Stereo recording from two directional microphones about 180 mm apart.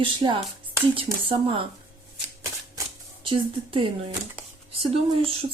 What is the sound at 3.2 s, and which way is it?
Speech, 30° right (ahead or behind).